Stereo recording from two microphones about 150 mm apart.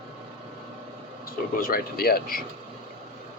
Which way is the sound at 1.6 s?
80° left.